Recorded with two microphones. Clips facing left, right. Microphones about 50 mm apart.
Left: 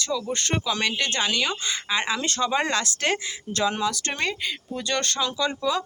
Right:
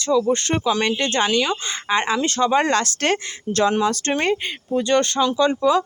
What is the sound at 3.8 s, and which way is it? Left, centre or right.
Speech, right.